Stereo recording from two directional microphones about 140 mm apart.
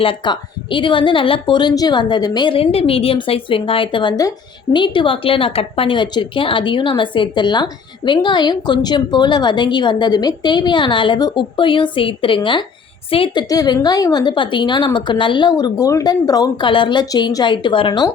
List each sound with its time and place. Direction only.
0.0 s a woman's voice: 40° left (ahead or behind)
13.5 s a woman's voice: 25° left (ahead or behind)